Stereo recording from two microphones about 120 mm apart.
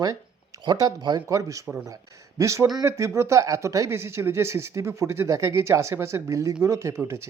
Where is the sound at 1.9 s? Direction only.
25° right (ahead or behind).